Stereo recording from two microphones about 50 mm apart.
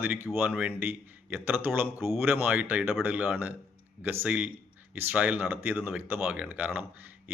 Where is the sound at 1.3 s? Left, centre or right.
Right.